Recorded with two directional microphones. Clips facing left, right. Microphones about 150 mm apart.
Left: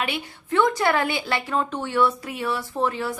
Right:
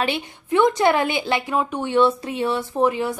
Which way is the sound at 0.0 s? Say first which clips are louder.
Right 4 dB; 25° right (ahead or behind).